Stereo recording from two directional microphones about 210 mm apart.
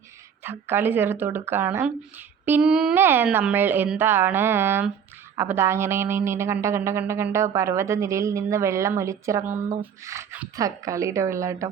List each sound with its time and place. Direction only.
0.4 s speech: 10° right (ahead or behind)